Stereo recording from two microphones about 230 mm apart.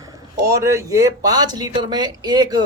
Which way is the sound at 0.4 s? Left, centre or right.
Centre.